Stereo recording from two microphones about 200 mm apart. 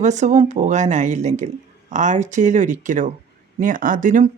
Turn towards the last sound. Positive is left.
turn(degrees=-40)  # may be behind; listen again after turning